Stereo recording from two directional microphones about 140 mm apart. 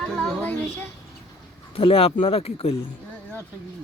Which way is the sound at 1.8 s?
45° left (ahead or behind).